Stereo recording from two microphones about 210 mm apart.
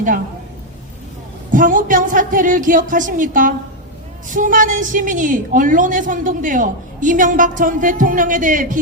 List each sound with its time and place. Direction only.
1.5 s a woman's voice: 40° right (ahead or behind)